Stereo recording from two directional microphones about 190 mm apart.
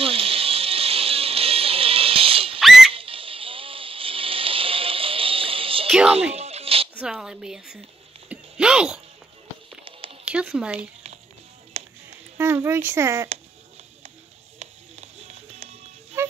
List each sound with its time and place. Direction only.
0.0 s music: 30° right (ahead or behind)
2.6 s whistle: centre (ahead or behind)
2.9 s music: 30° right (ahead or behind)
5.9 s music: 5° right (ahead or behind)
6.3 s music: 35° right (ahead or behind)
7.0 s speech: 5° right (ahead or behind)
8.3 s a sound: 5° right (ahead or behind)
10.2 s speech: 5° right (ahead or behind)
11.7 s music: 30° right (ahead or behind)
12.4 s a child's voice: 15° right (ahead or behind)
14.6 s music: 35° right (ahead or behind)